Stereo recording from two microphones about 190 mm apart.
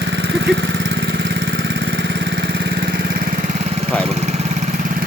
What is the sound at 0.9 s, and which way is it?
Vehicle, 60° right (ahead or behind).